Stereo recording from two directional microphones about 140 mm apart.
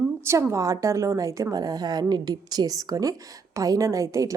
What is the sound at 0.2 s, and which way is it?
A woman's voice, 20° right (ahead or behind).